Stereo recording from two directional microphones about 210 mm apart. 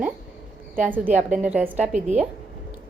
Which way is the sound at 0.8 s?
10° right (ahead or behind).